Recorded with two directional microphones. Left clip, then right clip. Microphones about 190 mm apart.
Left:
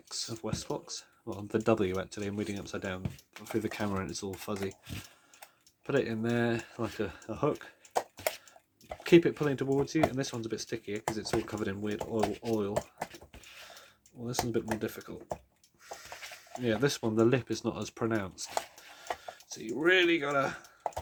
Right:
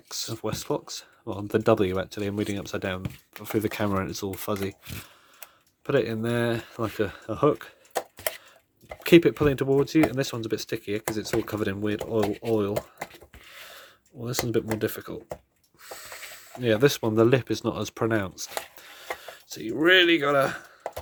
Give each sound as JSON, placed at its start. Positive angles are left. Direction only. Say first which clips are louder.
{"t": 0.1, "sound": "speech", "louder": "right 6 dB", "side_deg": -35}
{"t": 9.0, "sound": "speech", "louder": "right 6 dB", "side_deg": -40}
{"t": 13.7, "sound": "a sound", "louder": "right 6 dB", "side_deg": -40}
{"t": 14.8, "sound": "speech", "louder": "right 8 dB", "side_deg": -40}